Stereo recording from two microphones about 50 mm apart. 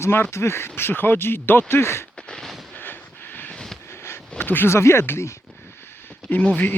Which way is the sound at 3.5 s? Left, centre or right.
Centre.